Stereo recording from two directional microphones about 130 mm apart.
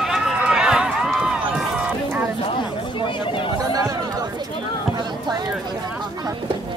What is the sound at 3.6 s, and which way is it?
Chatter, 25° right (ahead or behind).